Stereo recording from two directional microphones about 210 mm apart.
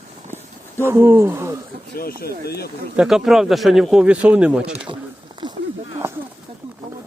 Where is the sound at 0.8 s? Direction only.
10° right (ahead or behind).